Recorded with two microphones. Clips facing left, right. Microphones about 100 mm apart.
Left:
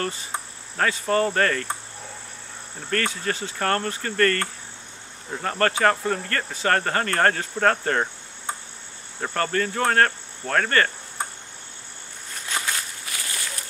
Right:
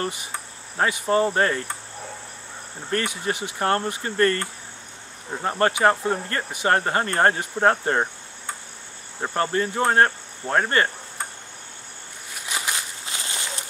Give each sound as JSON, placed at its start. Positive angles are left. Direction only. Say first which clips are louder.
{"t": 0.0, "sound": "speech", "louder": "even", "side_deg": -15}
{"t": 2.9, "sound": "speech", "louder": "even", "side_deg": -15}
{"t": 9.2, "sound": "speech", "louder": "right 1 dB", "side_deg": -20}
{"t": 12.4, "sound": "walk", "louder": "even", "side_deg": -20}